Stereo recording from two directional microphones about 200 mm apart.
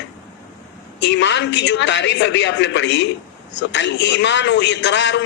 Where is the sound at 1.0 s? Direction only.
60° left (ahead or behind).